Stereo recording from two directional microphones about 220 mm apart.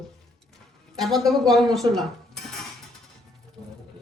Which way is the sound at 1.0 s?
Centre (ahead or behind).